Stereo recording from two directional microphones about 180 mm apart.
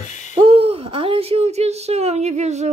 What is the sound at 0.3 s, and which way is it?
Speech, 30° right (ahead or behind).